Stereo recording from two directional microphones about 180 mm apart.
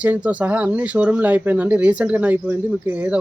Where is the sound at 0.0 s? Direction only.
10° right (ahead or behind).